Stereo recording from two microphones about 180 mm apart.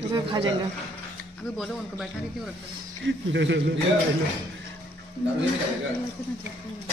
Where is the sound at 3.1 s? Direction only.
80° right.